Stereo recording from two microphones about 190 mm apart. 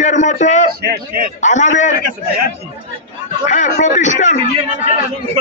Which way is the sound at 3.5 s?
40° left (ahead or behind).